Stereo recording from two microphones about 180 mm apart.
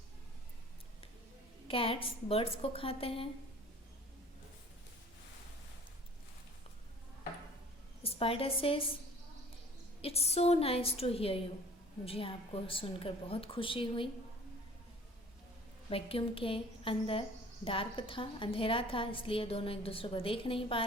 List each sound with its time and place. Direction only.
1.6 s a woman's voice: 30° left (ahead or behind)
8.0 s a woman's voice: 30° left (ahead or behind)
10.0 s a woman's voice: 35° left (ahead or behind)
15.9 s a woman's voice: 30° left (ahead or behind)